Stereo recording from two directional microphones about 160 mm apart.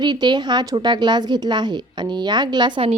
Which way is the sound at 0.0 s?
25° right (ahead or behind).